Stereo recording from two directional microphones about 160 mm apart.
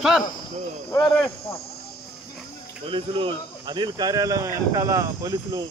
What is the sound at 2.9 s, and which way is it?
Speech, 35° right (ahead or behind).